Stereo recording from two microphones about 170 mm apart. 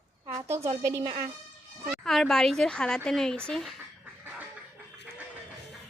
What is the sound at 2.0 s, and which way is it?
A woman's voice, centre (ahead or behind).